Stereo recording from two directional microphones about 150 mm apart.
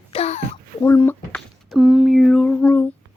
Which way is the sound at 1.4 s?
5° right (ahead or behind).